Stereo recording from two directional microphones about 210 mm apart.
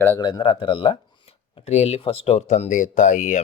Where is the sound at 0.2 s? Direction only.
20° left (ahead or behind).